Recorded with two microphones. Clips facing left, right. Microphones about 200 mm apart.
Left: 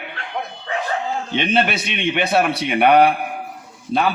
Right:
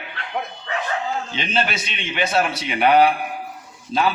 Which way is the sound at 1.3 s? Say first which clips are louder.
Left 8 dB; 60° left (ahead or behind).